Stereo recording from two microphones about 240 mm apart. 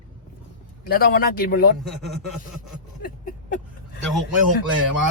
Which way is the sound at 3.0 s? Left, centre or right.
Left.